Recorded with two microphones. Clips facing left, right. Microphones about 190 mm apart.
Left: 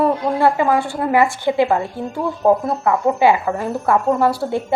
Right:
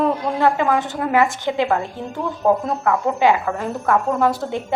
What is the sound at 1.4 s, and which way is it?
Speech, 15° left (ahead or behind).